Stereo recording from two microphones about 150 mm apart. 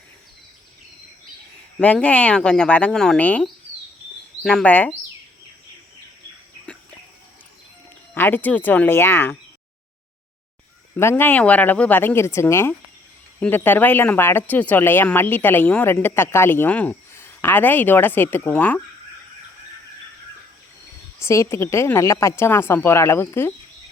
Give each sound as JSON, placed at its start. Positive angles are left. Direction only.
{"t": 1.8, "sound": "speech", "side_deg": 10}
{"t": 8.1, "sound": "speech", "side_deg": 15}
{"t": 10.9, "sound": "speech", "side_deg": 15}
{"t": 21.2, "sound": "speech", "side_deg": 20}